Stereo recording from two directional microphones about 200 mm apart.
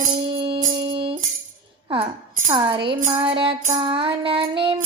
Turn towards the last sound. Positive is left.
turn(degrees=-25)  # may be behind; listen again after turning